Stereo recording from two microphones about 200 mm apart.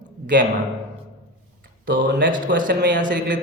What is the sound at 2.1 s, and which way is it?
Speech, 65° right (ahead or behind).